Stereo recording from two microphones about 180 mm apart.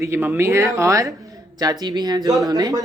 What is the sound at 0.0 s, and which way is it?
A woman's voice, 10° right (ahead or behind).